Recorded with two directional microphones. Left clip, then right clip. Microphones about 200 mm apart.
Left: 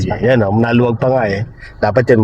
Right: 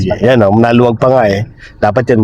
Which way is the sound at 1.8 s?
15° right (ahead or behind).